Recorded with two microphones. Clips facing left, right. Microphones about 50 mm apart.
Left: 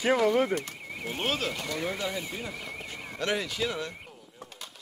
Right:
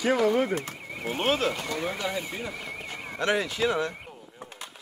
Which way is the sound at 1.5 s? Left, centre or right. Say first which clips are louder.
Right 2 dB; centre.